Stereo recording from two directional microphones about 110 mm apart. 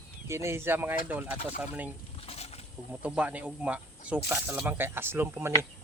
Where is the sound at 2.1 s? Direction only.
65° left (ahead or behind).